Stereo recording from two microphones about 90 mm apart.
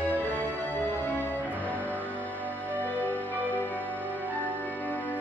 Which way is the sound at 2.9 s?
20° left (ahead or behind).